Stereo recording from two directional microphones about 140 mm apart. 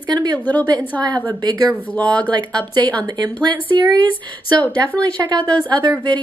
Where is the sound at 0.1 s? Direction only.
30° right (ahead or behind).